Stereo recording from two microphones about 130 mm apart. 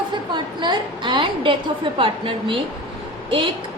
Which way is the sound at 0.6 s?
35° right (ahead or behind).